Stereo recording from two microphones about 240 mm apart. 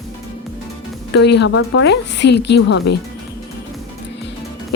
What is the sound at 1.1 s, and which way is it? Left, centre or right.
A woman's voice, left.